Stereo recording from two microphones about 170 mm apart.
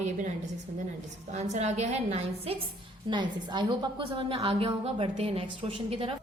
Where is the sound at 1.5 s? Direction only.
40° right (ahead or behind).